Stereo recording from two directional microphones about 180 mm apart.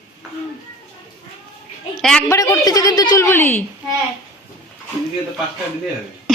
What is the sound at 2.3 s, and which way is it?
A woman's voice, 20° left (ahead or behind).